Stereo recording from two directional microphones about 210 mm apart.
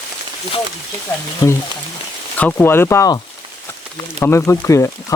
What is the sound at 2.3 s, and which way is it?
Speech, 10° left (ahead or behind).